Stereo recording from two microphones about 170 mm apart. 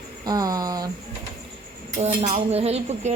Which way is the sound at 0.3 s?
20° right (ahead or behind).